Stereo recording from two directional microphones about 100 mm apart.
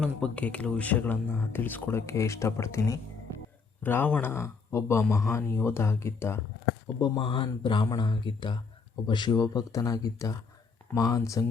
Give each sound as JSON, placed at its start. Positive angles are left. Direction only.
{"t": 0.0, "sound": "speech", "side_deg": 10}
{"t": 7.2, "sound": "speech", "side_deg": 60}